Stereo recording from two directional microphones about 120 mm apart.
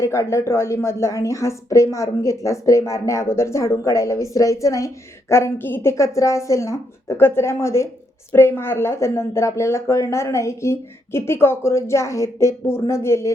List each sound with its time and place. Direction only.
0.0 s speech: 25° left (ahead or behind)